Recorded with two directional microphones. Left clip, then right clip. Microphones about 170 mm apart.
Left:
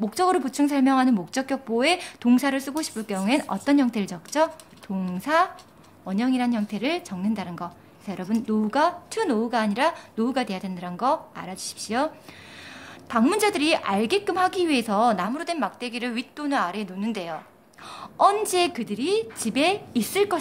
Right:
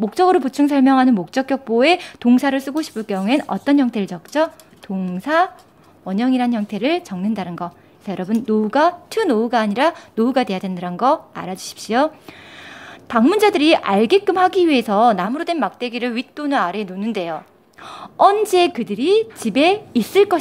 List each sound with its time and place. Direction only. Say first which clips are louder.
0.0 s a woman's voice: right 7 dB; 35° right (ahead or behind)
13.1 s speech: right 7 dB; 35° right (ahead or behind)